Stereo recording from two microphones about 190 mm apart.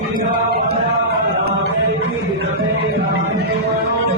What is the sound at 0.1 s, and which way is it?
Chant, 45° right (ahead or behind).